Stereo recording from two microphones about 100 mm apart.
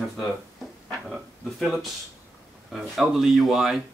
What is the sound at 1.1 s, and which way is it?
Speech, centre (ahead or behind).